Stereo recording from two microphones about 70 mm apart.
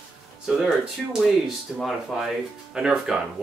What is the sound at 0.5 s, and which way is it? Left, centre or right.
Speech, centre.